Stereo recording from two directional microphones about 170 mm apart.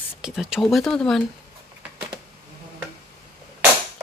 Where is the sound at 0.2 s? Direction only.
5° right (ahead or behind).